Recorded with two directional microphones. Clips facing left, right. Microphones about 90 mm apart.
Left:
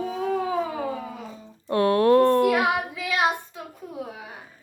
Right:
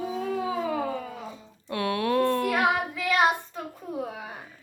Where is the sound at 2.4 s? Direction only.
10° left (ahead or behind).